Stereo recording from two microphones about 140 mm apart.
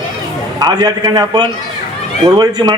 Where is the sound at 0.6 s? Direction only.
30° right (ahead or behind).